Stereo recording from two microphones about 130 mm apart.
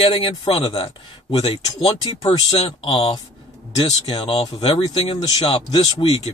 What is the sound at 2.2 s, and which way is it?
Speech, 30° left (ahead or behind).